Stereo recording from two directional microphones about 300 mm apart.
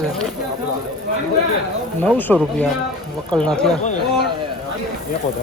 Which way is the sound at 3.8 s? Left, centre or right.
Left.